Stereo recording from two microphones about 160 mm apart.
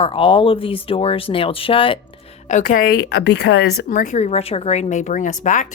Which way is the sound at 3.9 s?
50° left (ahead or behind).